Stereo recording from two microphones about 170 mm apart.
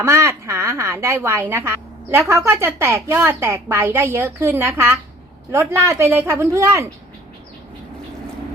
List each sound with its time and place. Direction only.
0.0 s a woman's voice: 15° right (ahead or behind)